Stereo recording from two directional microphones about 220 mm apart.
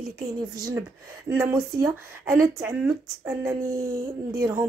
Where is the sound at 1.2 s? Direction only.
10° right (ahead or behind).